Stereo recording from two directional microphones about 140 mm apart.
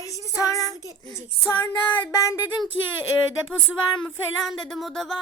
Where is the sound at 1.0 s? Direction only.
20° left (ahead or behind).